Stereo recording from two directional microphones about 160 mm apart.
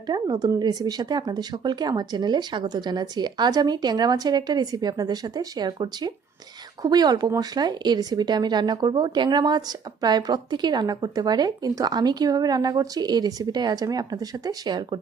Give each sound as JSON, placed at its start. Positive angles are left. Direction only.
{"t": 0.1, "sound": "speech", "side_deg": -25}